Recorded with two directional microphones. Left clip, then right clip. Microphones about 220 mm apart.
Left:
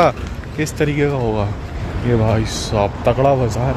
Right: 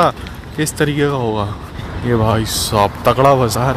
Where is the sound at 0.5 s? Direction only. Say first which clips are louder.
Right 2 dB; 15° right (ahead or behind).